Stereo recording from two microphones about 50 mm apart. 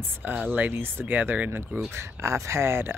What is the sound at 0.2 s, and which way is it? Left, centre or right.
Speech, right.